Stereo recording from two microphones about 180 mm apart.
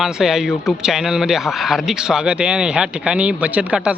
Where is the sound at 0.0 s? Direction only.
Centre (ahead or behind).